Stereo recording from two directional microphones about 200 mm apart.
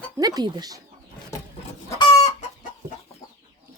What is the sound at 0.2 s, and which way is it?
Speech, 20° right (ahead or behind).